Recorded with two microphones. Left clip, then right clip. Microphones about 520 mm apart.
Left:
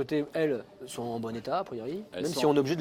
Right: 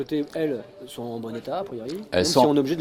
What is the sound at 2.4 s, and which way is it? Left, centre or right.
Speech, left.